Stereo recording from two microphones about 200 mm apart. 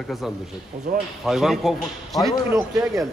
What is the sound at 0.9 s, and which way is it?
Speech, 45° right (ahead or behind).